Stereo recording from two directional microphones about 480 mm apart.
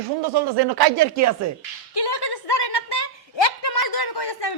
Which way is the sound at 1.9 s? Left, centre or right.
Left.